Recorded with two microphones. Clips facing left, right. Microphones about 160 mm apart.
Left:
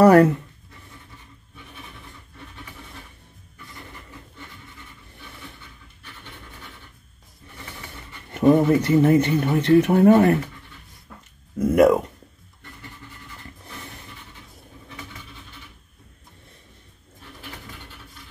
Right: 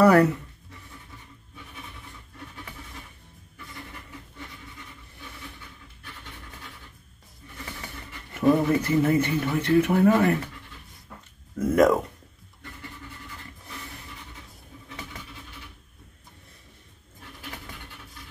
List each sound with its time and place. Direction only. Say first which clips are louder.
0.0 s speech: left 4 dB; 30° left (ahead or behind)
8.3 s speech: left 5 dB; 30° left (ahead or behind)
9.8 s speech: left 5 dB; 40° left (ahead or behind)
11.5 s speech: left 4 dB; 10° left (ahead or behind)